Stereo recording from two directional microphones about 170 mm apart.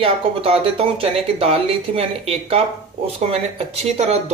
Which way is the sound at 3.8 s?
40° right (ahead or behind).